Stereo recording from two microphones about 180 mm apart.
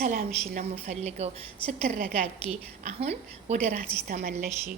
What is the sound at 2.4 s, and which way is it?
A woman's voice, 35° right (ahead or behind).